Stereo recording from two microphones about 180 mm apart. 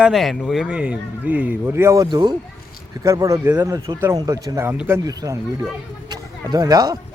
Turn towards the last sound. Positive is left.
turn(degrees=-20)  # may be behind; listen again after turning